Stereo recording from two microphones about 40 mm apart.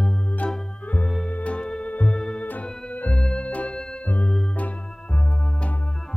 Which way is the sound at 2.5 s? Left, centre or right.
Left.